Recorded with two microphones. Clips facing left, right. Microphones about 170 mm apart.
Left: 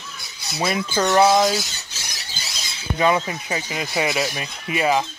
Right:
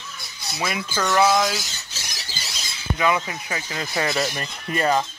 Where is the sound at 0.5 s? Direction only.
35° left (ahead or behind).